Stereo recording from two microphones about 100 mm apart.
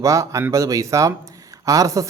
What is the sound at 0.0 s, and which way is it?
Speech, 30° right (ahead or behind).